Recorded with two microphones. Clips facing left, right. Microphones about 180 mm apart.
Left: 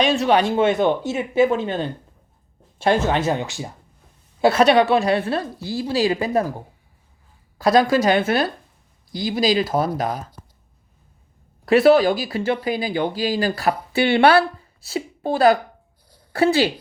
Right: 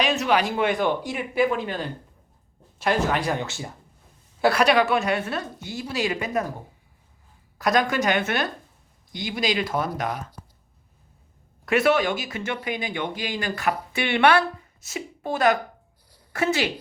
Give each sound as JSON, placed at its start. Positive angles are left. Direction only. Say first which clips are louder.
{"t": 0.0, "sound": "speech", "louder": "left 5 dB", "side_deg": 30}
{"t": 7.6, "sound": "speech", "louder": "left 6 dB", "side_deg": 30}
{"t": 11.6, "sound": "speech", "louder": "left 7 dB", "side_deg": 30}